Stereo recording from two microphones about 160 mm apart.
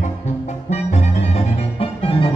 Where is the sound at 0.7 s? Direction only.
45° left (ahead or behind).